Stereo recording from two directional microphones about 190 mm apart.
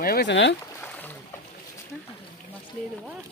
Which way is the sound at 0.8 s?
10° left (ahead or behind).